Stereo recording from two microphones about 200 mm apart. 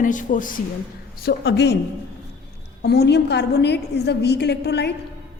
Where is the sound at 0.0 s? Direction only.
40° left (ahead or behind); by 1.7 s 55° left (ahead or behind).